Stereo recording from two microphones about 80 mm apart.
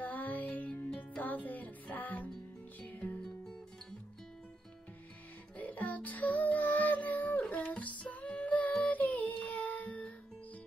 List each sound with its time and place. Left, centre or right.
0.0 s music: left
5.6 s music: left